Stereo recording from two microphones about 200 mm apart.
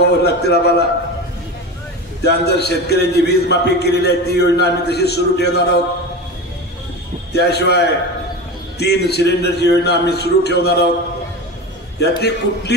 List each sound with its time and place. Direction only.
0.0 s a man's voice: 55° left (ahead or behind)
2.2 s a man's voice: 55° left (ahead or behind)
7.3 s a man's voice: 55° left (ahead or behind)
12.2 s a man's voice: 55° left (ahead or behind)